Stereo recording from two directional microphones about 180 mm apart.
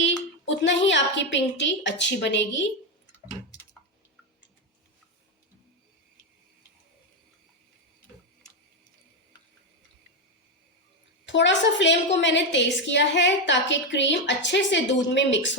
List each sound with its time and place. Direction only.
0.4 s a woman's voice: 85° left
11.3 s a woman's voice: 85° left